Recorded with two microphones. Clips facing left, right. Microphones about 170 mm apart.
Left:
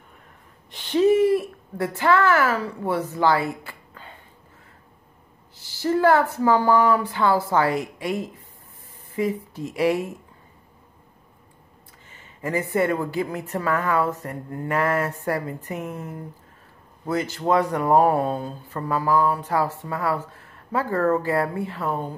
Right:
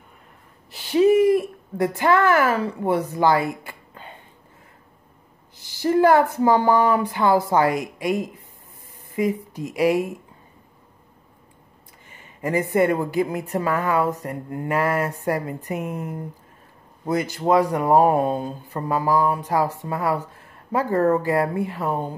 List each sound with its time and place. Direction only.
0.7 s a woman's voice: 10° right (ahead or behind)
5.6 s a woman's voice: 15° right (ahead or behind)
12.1 s a woman's voice: 15° right (ahead or behind)